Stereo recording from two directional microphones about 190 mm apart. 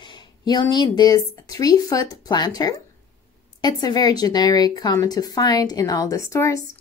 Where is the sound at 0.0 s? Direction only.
25° left (ahead or behind).